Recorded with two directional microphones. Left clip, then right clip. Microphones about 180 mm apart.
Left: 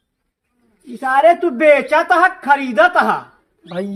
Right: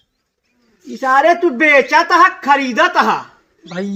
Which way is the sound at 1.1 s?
40° left (ahead or behind).